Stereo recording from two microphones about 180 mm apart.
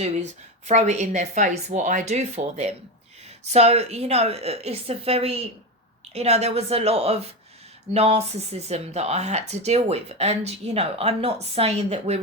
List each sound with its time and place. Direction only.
0.7 s speech: 40° right (ahead or behind)